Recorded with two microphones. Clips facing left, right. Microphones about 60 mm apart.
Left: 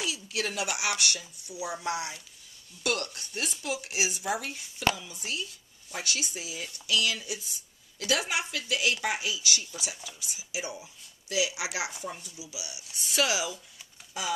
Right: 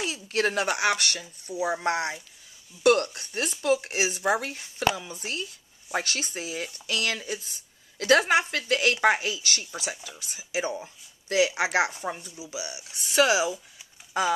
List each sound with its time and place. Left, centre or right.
0.0 s speech: right
14.2 s speech: right